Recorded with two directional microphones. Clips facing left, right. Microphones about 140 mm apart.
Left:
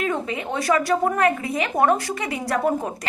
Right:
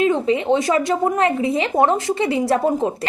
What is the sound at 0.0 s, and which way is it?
A woman's voice, 25° right (ahead or behind).